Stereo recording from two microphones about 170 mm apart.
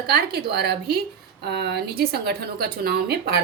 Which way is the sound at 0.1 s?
70° right (ahead or behind).